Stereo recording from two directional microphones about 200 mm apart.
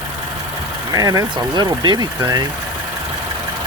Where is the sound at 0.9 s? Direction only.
20° right (ahead or behind).